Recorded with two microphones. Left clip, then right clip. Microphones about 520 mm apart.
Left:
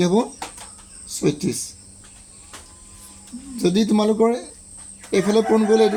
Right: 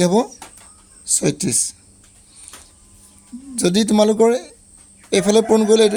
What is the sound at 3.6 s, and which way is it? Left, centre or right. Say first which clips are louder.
A man's voice: right 4 dB; right.